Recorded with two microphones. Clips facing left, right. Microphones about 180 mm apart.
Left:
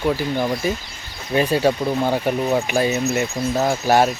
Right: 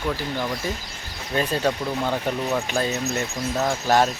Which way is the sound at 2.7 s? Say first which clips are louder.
Left 5 dB; 10° left (ahead or behind).